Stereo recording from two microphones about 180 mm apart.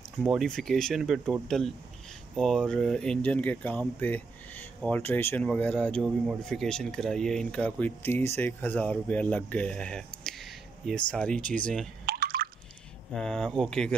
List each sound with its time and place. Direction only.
0.3 s speech: centre (ahead or behind)
12.1 s drip: 55° right (ahead or behind)
13.1 s speech: 5° left (ahead or behind)